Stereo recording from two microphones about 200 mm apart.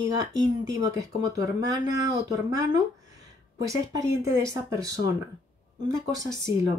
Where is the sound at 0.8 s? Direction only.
15° right (ahead or behind).